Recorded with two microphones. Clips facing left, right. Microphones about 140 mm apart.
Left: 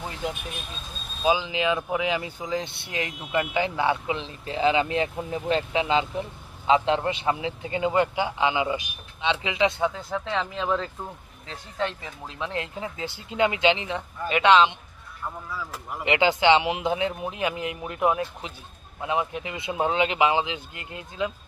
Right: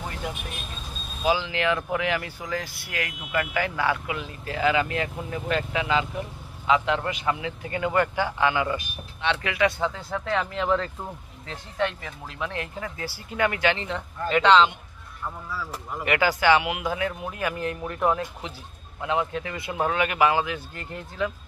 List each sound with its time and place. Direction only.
1.2 s speech: 15° left (ahead or behind)
12.0 s speech: 20° left (ahead or behind)